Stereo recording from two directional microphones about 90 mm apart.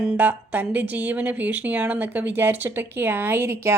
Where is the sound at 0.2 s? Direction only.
20° right (ahead or behind).